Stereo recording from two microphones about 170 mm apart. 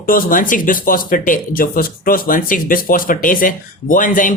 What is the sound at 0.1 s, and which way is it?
Speech, 55° left (ahead or behind).